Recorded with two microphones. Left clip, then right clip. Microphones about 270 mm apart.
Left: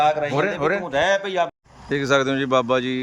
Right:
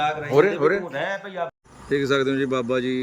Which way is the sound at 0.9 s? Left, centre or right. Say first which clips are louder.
Left 8 dB; left.